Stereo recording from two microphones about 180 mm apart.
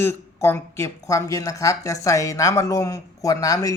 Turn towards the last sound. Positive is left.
turn(degrees=20)  # may be behind; listen again after turning